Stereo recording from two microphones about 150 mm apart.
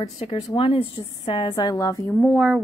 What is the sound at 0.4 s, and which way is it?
Speech, 25° left (ahead or behind).